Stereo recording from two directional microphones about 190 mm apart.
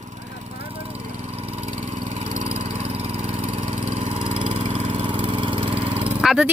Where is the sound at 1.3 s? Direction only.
35° right (ahead or behind).